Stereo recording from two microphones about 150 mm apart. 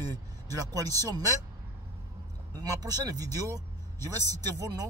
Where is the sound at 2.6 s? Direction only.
25° right (ahead or behind).